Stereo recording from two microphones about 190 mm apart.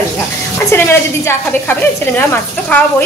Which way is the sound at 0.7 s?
15° left (ahead or behind).